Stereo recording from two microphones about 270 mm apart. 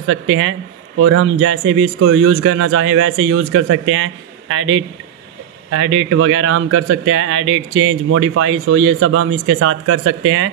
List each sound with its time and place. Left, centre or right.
0.0 s speech: right